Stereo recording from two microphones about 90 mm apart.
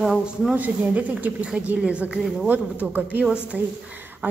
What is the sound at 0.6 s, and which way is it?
A woman's voice, 20° right (ahead or behind).